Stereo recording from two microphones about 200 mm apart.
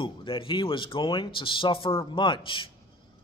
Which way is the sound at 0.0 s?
25° left (ahead or behind).